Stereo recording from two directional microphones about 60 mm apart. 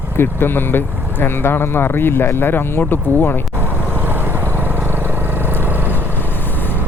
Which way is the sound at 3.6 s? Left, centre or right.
Right.